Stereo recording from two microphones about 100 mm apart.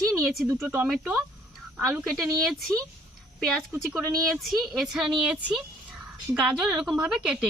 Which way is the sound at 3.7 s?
25° right (ahead or behind).